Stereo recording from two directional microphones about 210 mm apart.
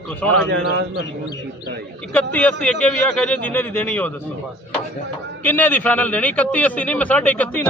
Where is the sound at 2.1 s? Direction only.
5° left (ahead or behind).